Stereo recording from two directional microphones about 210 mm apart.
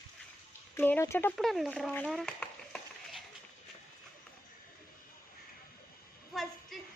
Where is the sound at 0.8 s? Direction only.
10° left (ahead or behind).